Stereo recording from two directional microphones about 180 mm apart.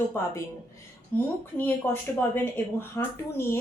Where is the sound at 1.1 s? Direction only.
10° left (ahead or behind).